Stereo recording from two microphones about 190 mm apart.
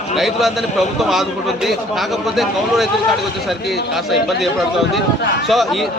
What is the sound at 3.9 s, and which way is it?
A man's voice, centre (ahead or behind).